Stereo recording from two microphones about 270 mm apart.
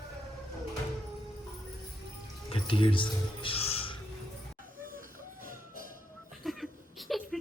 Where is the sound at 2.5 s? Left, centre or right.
Centre.